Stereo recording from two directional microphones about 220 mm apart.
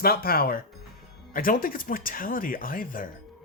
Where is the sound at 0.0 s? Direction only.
45° left (ahead or behind).